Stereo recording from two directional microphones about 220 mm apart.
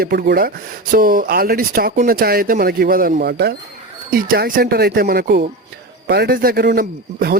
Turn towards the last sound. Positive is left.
turn(degrees=-45)  # may be behind; listen again after turning